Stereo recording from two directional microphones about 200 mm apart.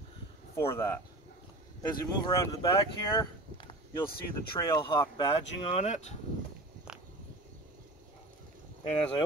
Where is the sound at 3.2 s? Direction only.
20° left (ahead or behind).